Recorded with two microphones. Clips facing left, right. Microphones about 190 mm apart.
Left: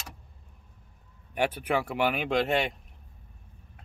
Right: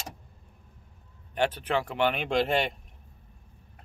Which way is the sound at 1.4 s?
10° left (ahead or behind).